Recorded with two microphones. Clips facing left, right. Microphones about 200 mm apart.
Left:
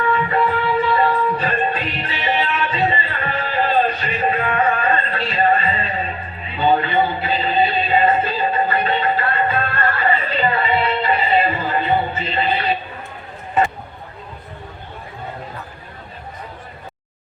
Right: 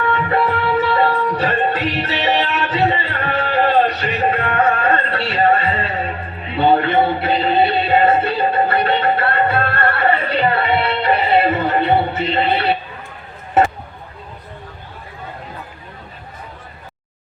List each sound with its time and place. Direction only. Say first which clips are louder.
0.3 s music: right 1 dB; 70° right (ahead or behind)